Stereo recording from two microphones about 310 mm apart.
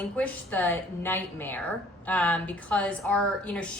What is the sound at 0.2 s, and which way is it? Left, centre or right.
A woman's voice, centre.